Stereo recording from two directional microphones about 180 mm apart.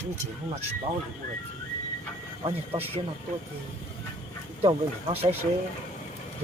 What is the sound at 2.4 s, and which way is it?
Speech, 35° right (ahead or behind).